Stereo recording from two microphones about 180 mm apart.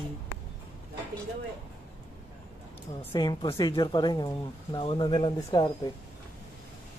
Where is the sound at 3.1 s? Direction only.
25° left (ahead or behind).